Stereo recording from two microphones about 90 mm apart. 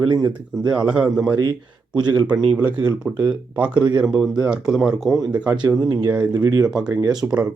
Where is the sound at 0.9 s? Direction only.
15° right (ahead or behind).